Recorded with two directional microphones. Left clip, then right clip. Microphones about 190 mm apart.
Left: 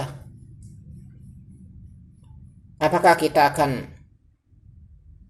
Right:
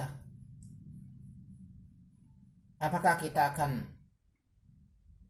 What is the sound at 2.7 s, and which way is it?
Speech, 25° left (ahead or behind).